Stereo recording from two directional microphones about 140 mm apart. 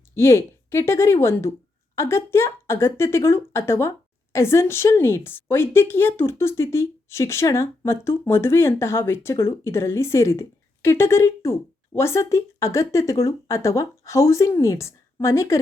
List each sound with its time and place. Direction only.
0.1 s a woman's voice: 20° left (ahead or behind)